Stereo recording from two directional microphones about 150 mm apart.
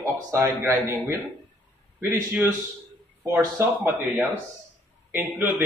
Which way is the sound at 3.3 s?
15° right (ahead or behind).